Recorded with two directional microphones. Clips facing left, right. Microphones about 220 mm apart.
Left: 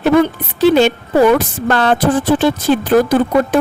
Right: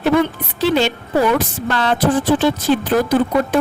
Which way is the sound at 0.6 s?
50° left (ahead or behind).